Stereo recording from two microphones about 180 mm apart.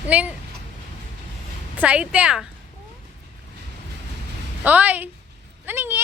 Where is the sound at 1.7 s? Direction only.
5° right (ahead or behind).